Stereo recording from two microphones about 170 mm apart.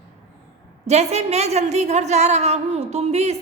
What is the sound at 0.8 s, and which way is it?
A woman's voice, 40° right (ahead or behind).